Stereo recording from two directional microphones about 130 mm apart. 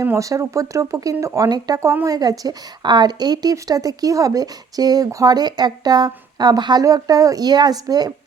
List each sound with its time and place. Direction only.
0.0 s a woman's voice: 25° right (ahead or behind)